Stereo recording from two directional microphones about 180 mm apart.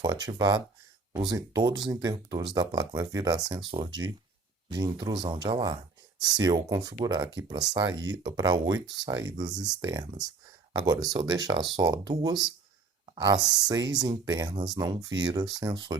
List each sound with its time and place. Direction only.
0.0 s speech: 20° right (ahead or behind)